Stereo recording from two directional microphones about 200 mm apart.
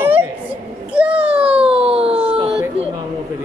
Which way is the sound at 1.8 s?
30° right (ahead or behind).